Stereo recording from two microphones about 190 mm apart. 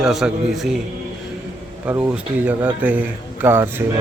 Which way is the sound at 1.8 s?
10° right (ahead or behind).